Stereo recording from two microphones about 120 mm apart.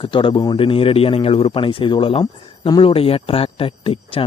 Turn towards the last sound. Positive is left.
turn(degrees=50)  # may be behind; listen again after turning